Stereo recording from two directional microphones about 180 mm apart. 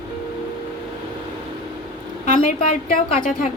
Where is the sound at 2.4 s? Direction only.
45° left (ahead or behind).